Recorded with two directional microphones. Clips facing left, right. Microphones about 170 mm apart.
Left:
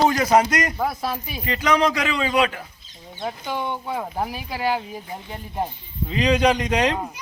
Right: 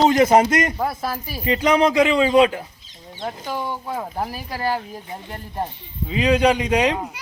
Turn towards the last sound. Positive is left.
turn(degrees=-5)  # may be behind; listen again after turning